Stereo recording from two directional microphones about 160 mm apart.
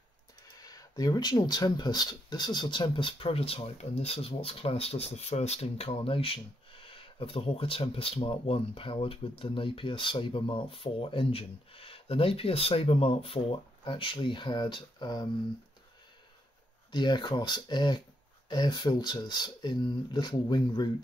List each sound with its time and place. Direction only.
0.6 s speech: 25° left (ahead or behind)
16.9 s speech: 30° left (ahead or behind)